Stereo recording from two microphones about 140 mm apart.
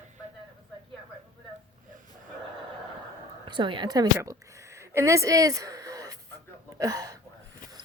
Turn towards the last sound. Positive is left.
turn(degrees=-25)  # may be behind; listen again after turning